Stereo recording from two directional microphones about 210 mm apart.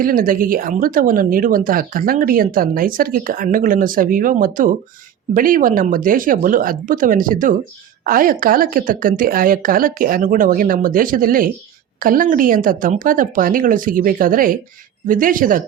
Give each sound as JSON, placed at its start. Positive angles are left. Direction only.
{"t": 0.0, "sound": "a woman's voice", "side_deg": -45}